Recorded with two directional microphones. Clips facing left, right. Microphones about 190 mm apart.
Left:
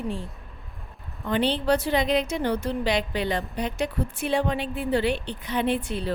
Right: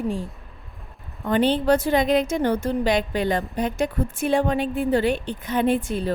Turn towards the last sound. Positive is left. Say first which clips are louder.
# right 4 dB
turn(degrees=-45)  # may be behind; listen again after turning